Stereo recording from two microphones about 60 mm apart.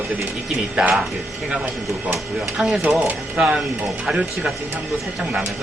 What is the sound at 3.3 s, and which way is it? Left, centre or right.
Speech, centre.